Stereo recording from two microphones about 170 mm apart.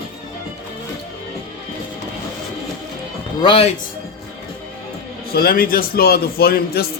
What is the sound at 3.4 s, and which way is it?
Speech, 30° left (ahead or behind).